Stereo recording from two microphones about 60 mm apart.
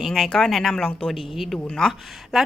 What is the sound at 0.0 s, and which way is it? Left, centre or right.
Speech, centre.